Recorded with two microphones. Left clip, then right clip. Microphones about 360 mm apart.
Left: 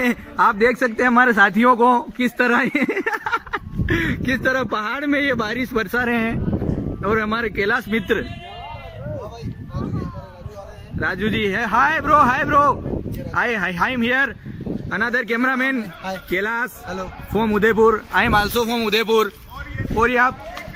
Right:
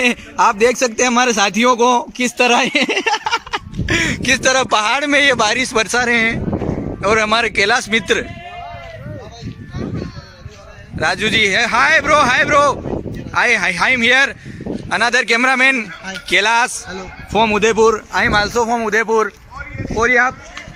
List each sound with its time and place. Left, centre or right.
0.0 s a man's voice: centre
6.5 s a sound: right
7.0 s speech: centre
11.0 s speech: centre